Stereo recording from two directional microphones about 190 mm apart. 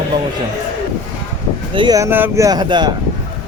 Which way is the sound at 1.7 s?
25° right (ahead or behind).